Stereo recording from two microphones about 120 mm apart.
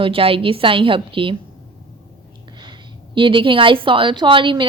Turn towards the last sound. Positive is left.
turn(degrees=-45)  # may be behind; listen again after turning